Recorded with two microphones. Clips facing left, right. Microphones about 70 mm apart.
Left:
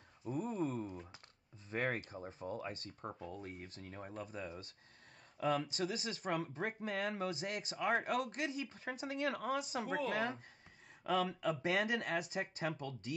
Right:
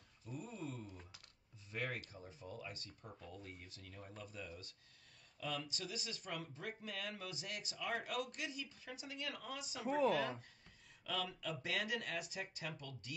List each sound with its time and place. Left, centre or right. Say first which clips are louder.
0.3 s a sound: left 10 dB; left
1.7 s speech: left 6 dB; left
3.2 s speech: left 7 dB; left
11.1 s speech: left 8 dB; left